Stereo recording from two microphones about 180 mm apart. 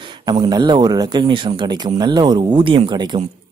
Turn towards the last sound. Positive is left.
turn(degrees=-25)  # may be behind; listen again after turning